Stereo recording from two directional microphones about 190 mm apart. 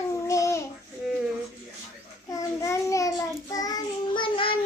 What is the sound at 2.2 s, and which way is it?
Child singing, 15° left (ahead or behind).